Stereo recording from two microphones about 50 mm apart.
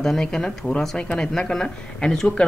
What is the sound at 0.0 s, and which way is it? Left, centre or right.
Speech, centre.